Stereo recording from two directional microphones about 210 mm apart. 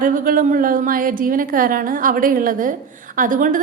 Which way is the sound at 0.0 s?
40° right (ahead or behind).